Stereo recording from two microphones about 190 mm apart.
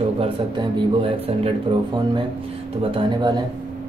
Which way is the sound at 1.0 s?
30° right (ahead or behind).